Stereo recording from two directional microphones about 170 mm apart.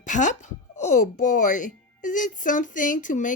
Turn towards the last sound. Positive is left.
turn(degrees=50)  # may be behind; listen again after turning